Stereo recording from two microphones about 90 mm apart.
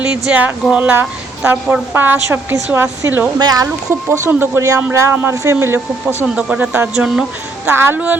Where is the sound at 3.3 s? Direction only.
45° right (ahead or behind).